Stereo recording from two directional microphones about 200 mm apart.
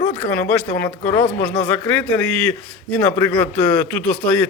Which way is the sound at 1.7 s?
5° left (ahead or behind).